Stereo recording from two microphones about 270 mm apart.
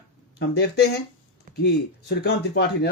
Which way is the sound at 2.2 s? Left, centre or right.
Left.